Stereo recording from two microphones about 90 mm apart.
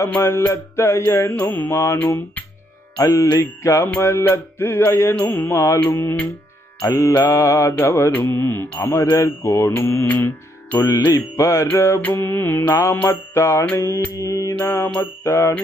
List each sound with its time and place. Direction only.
0.2 s music: 30° left (ahead or behind)
2.0 s mantra: 25° left (ahead or behind)
3.0 s music: 35° left (ahead or behind)
3.9 s mantra: 25° left (ahead or behind)
6.9 s music: 35° left (ahead or behind)
7.2 s mantra: 35° left (ahead or behind)
10.8 s music: 35° left (ahead or behind)
12.0 s mantra: 25° left (ahead or behind)
12.6 s music: 40° left (ahead or behind)
12.9 s music: 25° left (ahead or behind)
13.7 s mantra: 25° left (ahead or behind)
15.0 s music: 30° left (ahead or behind)